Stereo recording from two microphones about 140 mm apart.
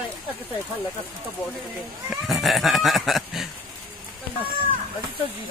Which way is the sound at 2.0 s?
Centre (ahead or behind).